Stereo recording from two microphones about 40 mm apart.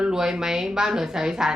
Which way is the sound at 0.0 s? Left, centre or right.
Centre.